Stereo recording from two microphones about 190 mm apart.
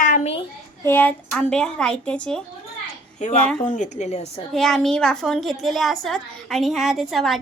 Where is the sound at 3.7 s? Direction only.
40° left (ahead or behind).